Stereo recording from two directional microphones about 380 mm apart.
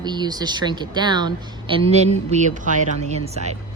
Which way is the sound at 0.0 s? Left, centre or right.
Centre.